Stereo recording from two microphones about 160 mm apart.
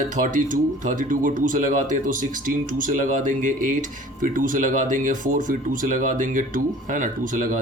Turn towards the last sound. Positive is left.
turn(degrees=-55)  # may be behind; listen again after turning